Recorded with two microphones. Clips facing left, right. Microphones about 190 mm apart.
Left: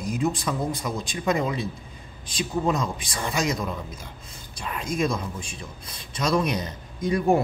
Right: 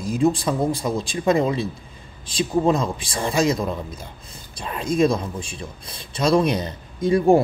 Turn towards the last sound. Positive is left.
turn(degrees=-30)  # may be behind; listen again after turning